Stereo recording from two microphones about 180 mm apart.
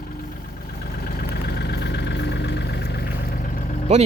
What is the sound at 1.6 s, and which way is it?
Vehicle, 70° left (ahead or behind).